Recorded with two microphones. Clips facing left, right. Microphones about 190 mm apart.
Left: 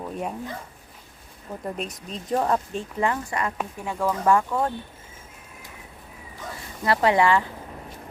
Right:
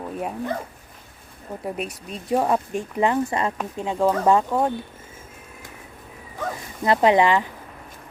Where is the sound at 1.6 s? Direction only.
5° right (ahead or behind).